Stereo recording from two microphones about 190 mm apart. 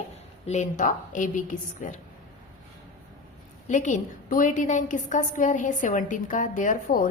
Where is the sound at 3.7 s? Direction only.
40° left (ahead or behind).